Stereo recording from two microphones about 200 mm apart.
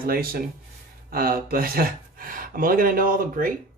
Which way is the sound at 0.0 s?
45° right (ahead or behind).